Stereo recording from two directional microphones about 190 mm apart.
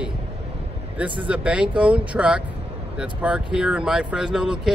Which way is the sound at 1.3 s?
5° right (ahead or behind).